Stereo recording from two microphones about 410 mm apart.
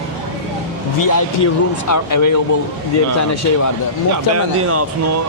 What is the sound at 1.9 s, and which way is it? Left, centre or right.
Speech, left.